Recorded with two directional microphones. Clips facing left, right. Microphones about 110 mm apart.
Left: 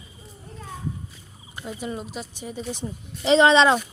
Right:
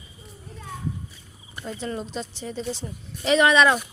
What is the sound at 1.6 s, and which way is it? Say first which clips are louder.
A woman's voice: right 1 dB; 10° left (ahead or behind).